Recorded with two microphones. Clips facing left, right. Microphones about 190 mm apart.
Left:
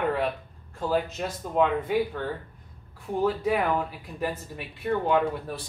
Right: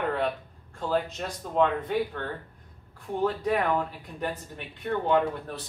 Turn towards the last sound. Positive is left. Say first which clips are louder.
# even
turn(degrees=5)  # may be behind; listen again after turning